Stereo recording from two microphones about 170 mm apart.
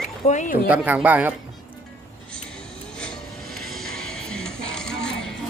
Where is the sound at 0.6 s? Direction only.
10° right (ahead or behind).